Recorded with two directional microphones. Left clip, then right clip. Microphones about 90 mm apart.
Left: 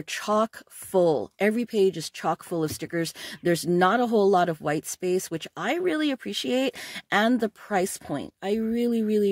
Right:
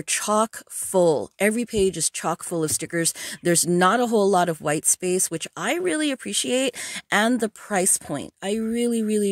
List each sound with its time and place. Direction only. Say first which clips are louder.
0.1 s speech: right 3 dB; 50° right (ahead or behind)